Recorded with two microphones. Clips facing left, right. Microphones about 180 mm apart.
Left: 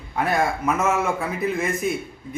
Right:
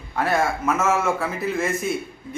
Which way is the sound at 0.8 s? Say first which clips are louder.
Right 2 dB; 15° left (ahead or behind).